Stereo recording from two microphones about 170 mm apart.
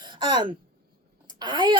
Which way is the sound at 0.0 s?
25° right (ahead or behind).